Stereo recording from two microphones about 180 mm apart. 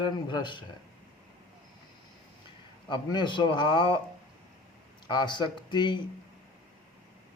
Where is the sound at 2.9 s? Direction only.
25° left (ahead or behind).